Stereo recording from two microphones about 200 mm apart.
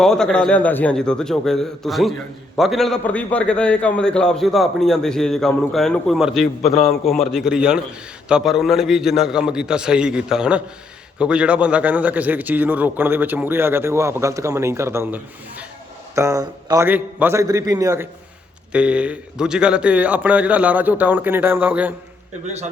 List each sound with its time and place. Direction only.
0.0 s a man's voice: 5° left (ahead or behind)
22.4 s a man's voice: 35° right (ahead or behind)